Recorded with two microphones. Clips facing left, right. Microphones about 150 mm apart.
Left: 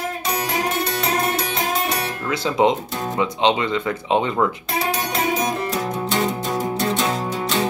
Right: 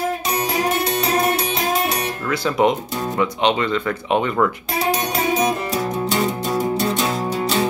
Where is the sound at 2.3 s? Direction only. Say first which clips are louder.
Even; 20° left (ahead or behind).